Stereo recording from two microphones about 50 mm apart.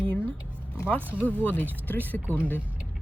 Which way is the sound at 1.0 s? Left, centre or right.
Right.